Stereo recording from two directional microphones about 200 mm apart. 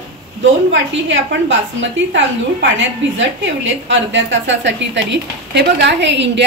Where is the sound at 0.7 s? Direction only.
65° right (ahead or behind).